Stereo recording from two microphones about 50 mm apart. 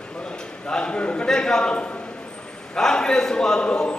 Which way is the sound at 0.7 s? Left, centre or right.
Centre.